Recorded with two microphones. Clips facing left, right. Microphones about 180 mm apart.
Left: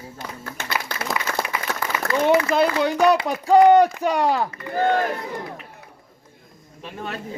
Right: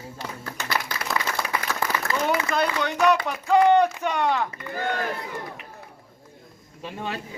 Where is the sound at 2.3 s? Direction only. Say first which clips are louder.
Left 7 dB; 30° left (ahead or behind).